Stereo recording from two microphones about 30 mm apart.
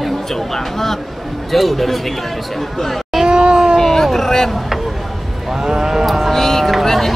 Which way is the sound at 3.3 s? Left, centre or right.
Right.